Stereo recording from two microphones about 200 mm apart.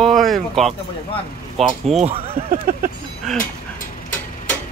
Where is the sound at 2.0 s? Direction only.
30° right (ahead or behind).